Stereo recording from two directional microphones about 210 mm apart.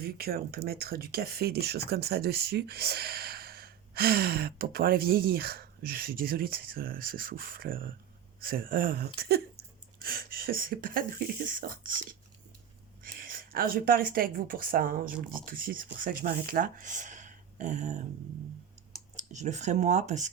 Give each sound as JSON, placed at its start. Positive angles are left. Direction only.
{"t": 0.0, "sound": "speech", "side_deg": -45}
{"t": 13.0, "sound": "speech", "side_deg": -40}
{"t": 19.1, "sound": "speech", "side_deg": -35}